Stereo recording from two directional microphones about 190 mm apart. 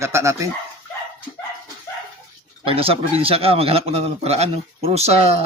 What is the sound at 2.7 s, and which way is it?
A man's voice, 30° right (ahead or behind).